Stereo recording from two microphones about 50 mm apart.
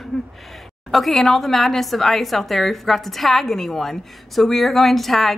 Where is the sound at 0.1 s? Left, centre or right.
Centre.